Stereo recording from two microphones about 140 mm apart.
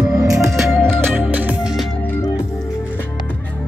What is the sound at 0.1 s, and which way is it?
Music, 20° right (ahead or behind).